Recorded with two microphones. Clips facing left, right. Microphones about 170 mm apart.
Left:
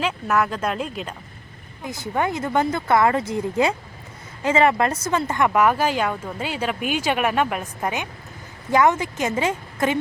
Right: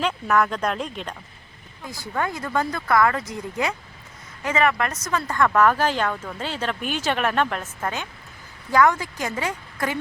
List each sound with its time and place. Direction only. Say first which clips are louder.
0.0 s speech: even; 5° left (ahead or behind)
1.8 s speech: left 3 dB; 20° left (ahead or behind)